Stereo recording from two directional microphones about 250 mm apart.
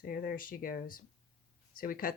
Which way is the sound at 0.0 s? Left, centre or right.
Left.